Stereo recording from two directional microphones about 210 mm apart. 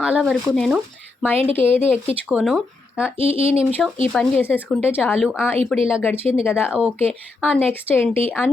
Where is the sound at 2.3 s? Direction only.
Centre (ahead or behind).